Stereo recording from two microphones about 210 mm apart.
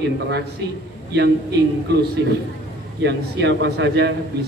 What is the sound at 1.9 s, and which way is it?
A man's voice, 50° right (ahead or behind).